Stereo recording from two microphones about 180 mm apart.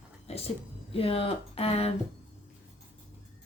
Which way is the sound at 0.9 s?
30° left (ahead or behind).